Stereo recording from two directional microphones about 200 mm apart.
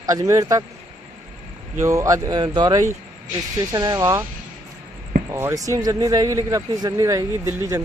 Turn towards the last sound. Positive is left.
turn(degrees=-15)  # may be behind; listen again after turning